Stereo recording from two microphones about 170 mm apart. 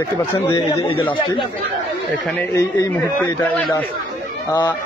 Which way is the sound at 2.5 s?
15° left (ahead or behind).